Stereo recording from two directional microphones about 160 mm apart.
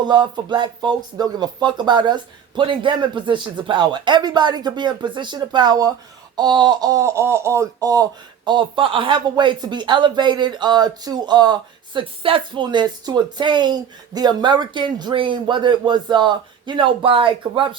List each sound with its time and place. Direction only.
0.0 s speech: 30° right (ahead or behind)